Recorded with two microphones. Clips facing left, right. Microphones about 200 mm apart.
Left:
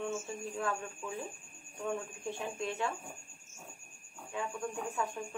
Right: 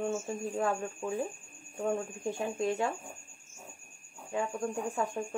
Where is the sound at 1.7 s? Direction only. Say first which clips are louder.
Right 5 dB; 45° right (ahead or behind).